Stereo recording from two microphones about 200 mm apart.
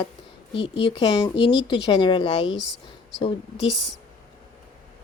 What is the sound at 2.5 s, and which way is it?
A woman's voice, 60° left (ahead or behind).